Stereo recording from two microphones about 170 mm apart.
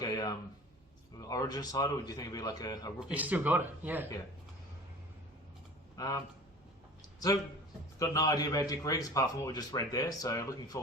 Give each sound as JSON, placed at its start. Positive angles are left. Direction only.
{"t": 0.0, "sound": "a man's voice", "side_deg": 20}
{"t": 3.0, "sound": "speech", "side_deg": -10}
{"t": 6.0, "sound": "a man's voice", "side_deg": 20}
{"t": 7.9, "sound": "a man's voice", "side_deg": 20}